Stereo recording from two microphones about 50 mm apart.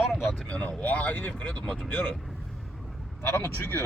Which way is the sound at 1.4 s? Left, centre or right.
Left.